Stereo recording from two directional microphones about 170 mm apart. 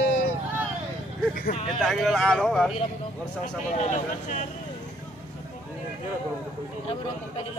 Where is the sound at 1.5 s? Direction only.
40° left (ahead or behind).